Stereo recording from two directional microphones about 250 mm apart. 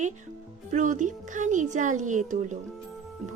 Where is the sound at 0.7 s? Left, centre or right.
Right.